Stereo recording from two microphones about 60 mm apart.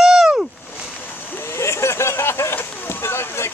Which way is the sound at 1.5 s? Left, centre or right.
Left.